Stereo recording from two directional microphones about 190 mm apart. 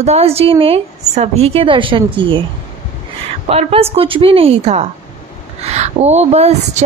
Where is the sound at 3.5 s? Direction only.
30° right (ahead or behind).